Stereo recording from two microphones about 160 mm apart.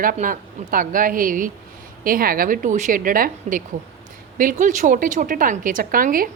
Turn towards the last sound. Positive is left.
turn(degrees=-60)  # may be behind; listen again after turning